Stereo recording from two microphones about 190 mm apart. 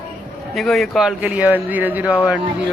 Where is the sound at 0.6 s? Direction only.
Centre (ahead or behind).